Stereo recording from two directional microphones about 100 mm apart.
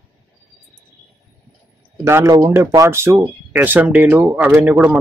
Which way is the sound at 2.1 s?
30° right (ahead or behind).